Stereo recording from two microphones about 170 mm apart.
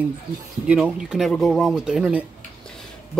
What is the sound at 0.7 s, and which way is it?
Speech, 5° right (ahead or behind).